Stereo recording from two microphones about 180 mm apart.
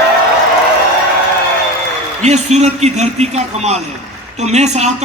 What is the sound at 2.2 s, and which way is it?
A man's voice, 40° right (ahead or behind).